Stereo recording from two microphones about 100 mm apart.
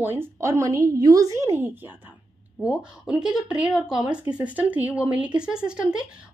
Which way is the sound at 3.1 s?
5° right (ahead or behind).